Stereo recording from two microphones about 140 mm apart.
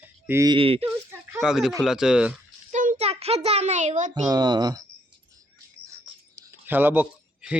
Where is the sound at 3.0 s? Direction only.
45° right (ahead or behind).